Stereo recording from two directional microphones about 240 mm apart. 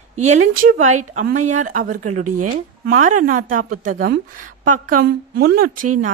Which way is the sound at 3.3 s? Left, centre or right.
Right.